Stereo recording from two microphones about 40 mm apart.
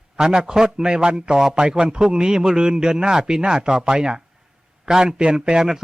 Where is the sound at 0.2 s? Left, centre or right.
Centre.